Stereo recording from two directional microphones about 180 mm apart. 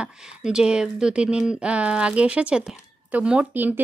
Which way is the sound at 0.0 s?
5° right (ahead or behind).